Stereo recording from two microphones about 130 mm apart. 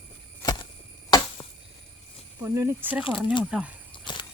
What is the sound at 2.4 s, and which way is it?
Speech, 25° right (ahead or behind).